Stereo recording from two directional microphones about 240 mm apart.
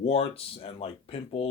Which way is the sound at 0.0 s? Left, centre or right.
Left.